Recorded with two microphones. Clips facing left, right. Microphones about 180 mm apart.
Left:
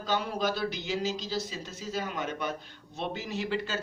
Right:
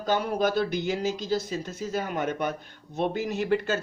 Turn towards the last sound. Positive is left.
turn(degrees=-50)  # may be behind; listen again after turning